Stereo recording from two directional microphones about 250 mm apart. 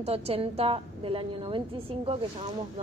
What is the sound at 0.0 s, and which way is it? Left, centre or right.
A woman's voice, right.